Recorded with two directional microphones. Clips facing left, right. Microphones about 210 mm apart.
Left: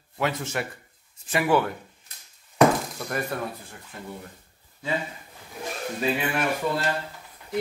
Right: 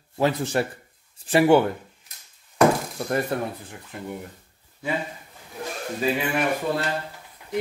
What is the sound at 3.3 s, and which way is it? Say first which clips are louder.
Speech: right 4 dB; 25° right (ahead or behind).